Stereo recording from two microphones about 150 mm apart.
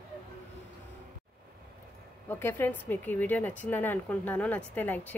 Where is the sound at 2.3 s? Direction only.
15° left (ahead or behind).